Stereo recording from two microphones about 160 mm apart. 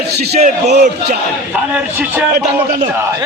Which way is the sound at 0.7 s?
90° right.